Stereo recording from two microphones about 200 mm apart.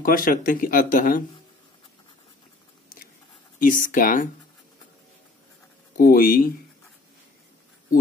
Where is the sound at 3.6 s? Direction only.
45° left (ahead or behind).